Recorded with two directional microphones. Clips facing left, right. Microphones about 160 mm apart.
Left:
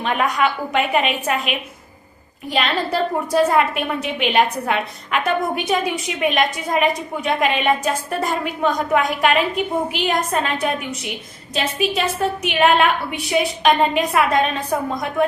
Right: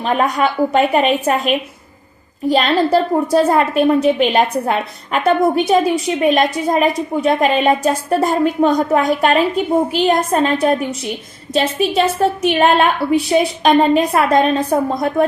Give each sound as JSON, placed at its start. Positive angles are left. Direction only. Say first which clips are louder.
{"t": 0.0, "sound": "a woman's voice", "louder": "right 3 dB", "side_deg": -35}